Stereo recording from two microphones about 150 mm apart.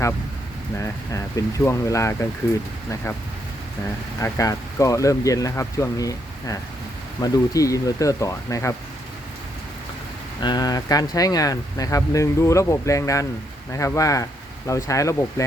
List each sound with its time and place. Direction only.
0.8 s speech: 20° left (ahead or behind)
4.2 s speech: 20° left (ahead or behind)
10.4 s speech: 25° left (ahead or behind)